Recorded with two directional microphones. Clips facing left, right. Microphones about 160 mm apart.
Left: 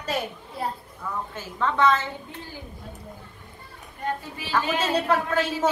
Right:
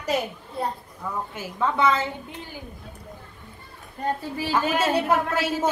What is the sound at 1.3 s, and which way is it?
Speech, 10° right (ahead or behind).